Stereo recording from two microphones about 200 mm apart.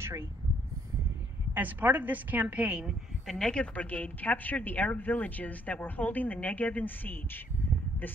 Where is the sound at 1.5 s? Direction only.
10° right (ahead or behind).